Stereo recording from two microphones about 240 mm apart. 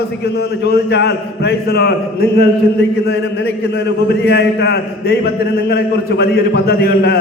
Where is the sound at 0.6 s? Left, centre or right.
Left.